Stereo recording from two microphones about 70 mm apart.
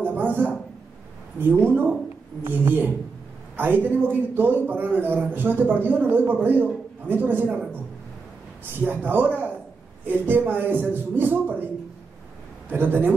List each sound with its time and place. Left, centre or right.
0.0 s a sound: right
1.4 s a man's voice: right
8.8 s a man's voice: right
12.6 s a man's voice: right